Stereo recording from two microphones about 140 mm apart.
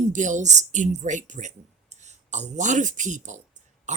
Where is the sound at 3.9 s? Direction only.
55° right (ahead or behind).